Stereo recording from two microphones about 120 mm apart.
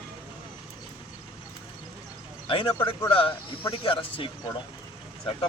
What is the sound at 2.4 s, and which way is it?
Speech, 45° left (ahead or behind).